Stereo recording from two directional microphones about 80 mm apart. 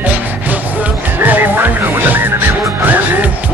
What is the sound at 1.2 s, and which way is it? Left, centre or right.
Music, right.